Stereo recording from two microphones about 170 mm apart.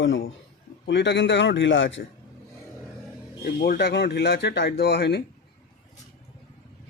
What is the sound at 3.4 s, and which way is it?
Speech, 65° left (ahead or behind).